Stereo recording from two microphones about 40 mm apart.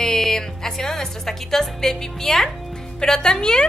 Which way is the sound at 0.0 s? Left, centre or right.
Centre.